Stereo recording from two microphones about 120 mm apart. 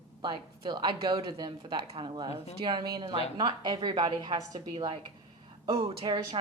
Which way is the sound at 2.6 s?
40° right (ahead or behind).